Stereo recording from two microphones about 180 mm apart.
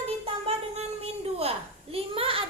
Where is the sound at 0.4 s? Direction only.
35° right (ahead or behind).